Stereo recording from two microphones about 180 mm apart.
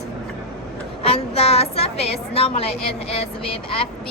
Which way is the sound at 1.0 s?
35° left (ahead or behind).